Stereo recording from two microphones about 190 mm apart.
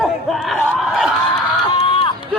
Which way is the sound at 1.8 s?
30° left (ahead or behind).